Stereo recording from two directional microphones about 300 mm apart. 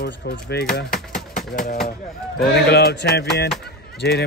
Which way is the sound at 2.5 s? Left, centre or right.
Left.